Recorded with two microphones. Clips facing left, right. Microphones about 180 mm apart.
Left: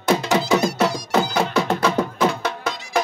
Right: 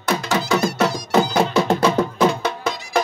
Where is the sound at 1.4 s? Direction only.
20° right (ahead or behind).